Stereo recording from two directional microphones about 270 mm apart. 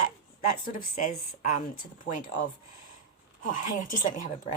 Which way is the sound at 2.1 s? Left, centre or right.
Left.